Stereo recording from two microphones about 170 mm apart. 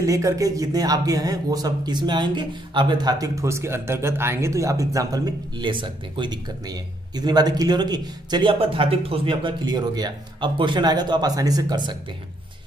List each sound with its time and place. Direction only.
0.0 s speech: 20° right (ahead or behind)